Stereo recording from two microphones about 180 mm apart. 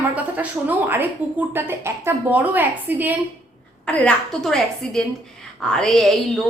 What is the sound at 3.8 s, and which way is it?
A woman's voice, 5° left (ahead or behind).